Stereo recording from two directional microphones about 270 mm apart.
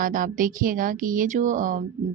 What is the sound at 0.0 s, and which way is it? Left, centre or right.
Speech, right.